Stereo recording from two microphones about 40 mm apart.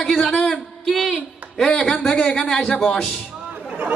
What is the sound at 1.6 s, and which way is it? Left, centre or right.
A woman's voice, left.